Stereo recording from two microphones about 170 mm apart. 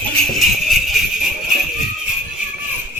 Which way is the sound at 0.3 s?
Centre (ahead or behind).